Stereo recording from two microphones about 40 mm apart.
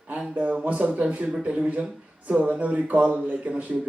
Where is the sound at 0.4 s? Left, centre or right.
Right.